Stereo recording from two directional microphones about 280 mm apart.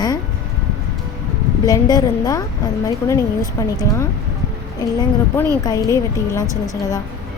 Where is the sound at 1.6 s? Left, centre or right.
Centre.